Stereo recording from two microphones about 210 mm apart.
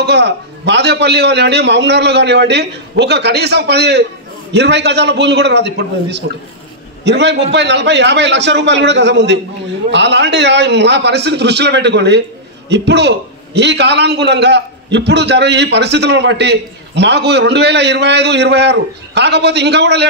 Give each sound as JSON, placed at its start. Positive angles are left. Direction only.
{"t": 0.0, "sound": "a man's voice", "side_deg": -55}